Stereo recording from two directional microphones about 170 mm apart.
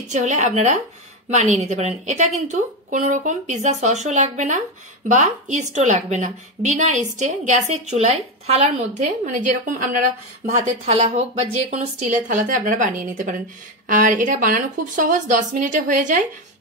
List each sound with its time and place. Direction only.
0.1 s speech: 45° right (ahead or behind)